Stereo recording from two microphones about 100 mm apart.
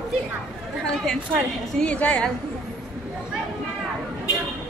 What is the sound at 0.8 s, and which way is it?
A woman's voice, 5° left (ahead or behind).